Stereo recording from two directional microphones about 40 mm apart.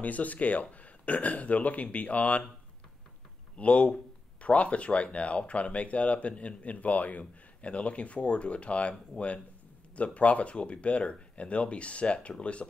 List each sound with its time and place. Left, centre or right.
0.0 s speech: left
3.5 s speech: left
9.9 s speech: left